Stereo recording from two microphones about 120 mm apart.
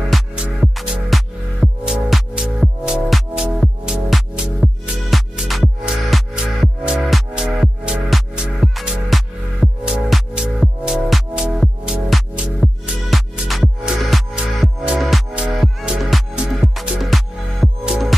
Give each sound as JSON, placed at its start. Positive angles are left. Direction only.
{"t": 0.1, "sound": "music", "side_deg": -5}